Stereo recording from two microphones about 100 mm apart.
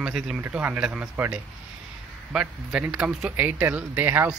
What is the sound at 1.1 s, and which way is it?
Speech, 20° right (ahead or behind).